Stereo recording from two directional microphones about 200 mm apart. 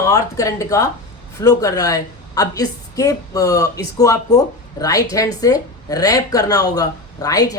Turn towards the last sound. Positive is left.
turn(degrees=20)  # may be behind; listen again after turning